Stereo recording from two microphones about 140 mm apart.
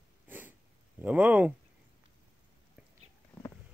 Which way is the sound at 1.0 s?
10° right (ahead or behind).